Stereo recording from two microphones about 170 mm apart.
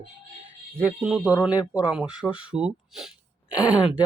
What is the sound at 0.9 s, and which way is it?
Speech, 5° right (ahead or behind).